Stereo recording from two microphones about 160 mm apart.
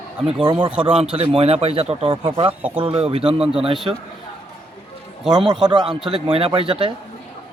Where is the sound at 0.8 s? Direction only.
35° right (ahead or behind).